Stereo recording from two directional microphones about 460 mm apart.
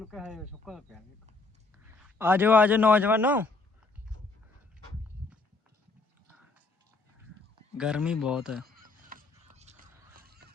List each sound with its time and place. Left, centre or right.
0.0 s a man's voice: centre
7.8 s speech: centre
8.6 s honk: centre